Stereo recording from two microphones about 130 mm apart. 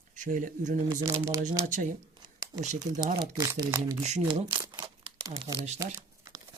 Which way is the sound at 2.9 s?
35° right (ahead or behind).